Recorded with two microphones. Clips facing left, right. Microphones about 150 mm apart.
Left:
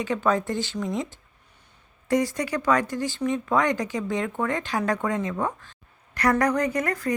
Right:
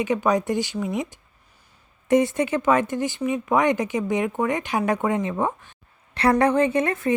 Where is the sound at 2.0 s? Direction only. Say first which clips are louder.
Right 5 dB; 20° right (ahead or behind).